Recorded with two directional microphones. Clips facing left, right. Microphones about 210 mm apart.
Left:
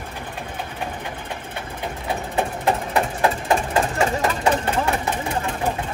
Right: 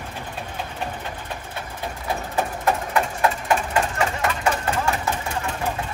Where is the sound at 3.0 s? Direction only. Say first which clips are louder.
Left 1 dB; 30° left (ahead or behind).